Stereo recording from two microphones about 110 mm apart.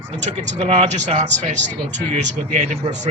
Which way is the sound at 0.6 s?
70° right (ahead or behind).